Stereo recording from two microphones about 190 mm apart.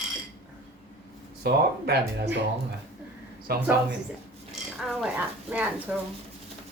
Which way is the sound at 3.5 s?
55° right (ahead or behind).